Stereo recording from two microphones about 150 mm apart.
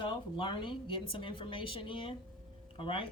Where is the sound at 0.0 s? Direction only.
35° left (ahead or behind).